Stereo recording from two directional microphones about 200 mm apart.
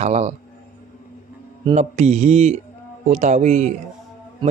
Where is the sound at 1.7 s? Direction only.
35° right (ahead or behind).